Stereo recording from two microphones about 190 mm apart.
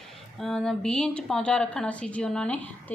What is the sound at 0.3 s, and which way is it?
Speech, 5° left (ahead or behind).